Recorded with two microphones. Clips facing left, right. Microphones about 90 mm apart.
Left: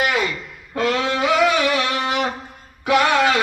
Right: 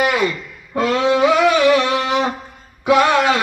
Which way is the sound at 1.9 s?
20° right (ahead or behind).